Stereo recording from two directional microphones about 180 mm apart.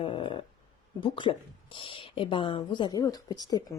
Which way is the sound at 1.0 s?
25° left (ahead or behind).